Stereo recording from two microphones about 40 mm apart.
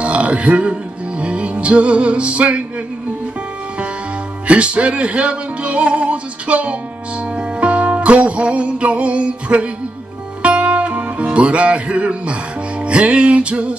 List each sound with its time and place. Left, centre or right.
0.0 s burping: right
1.2 s music: right
4.5 s music: right